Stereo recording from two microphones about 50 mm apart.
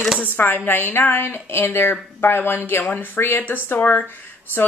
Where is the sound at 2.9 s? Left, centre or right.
Left.